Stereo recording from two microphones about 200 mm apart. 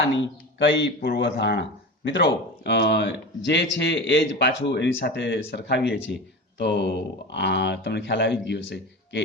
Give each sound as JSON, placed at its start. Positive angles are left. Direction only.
{"t": 0.6, "sound": "speech", "side_deg": 60}